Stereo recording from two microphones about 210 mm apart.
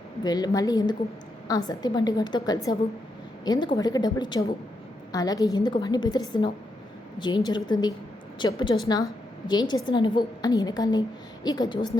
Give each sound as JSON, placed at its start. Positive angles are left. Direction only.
{"t": 0.2, "sound": "a woman's voice", "side_deg": 20}